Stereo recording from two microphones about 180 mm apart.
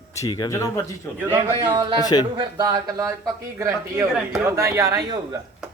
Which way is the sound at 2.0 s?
20° left (ahead or behind).